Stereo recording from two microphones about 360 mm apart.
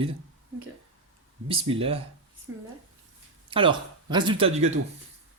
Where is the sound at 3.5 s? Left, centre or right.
Centre.